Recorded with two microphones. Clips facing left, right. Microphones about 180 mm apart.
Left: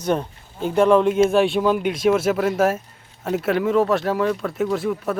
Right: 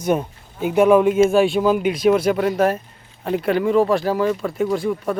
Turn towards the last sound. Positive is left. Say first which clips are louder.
# right 1 dB
turn(degrees=0)  # may be behind; listen again after turning